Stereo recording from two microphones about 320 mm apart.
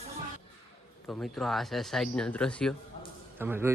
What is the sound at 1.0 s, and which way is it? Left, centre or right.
Speech, centre.